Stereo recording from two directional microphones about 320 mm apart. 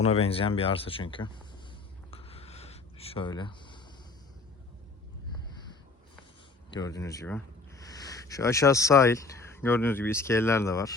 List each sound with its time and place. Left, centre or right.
0.0 s speech: centre
2.0 s a sound: centre
6.7 s speech: centre